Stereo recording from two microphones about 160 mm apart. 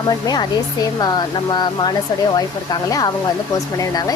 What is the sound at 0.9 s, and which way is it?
Speech, 25° left (ahead or behind).